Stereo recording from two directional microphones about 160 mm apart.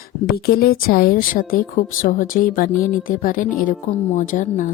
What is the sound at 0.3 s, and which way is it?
A woman's voice, 75° left (ahead or behind).